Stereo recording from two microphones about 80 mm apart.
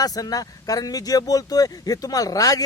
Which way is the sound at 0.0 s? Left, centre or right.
Left.